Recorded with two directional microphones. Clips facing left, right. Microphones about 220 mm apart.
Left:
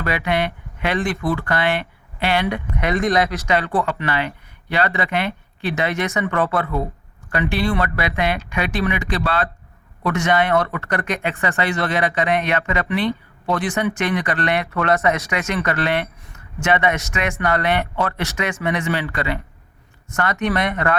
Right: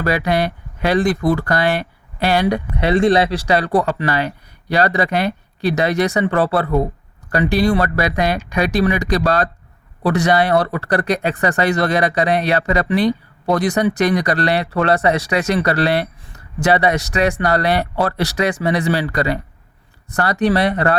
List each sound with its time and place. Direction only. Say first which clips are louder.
0.0 s speech: right 4 dB; 40° right (ahead or behind)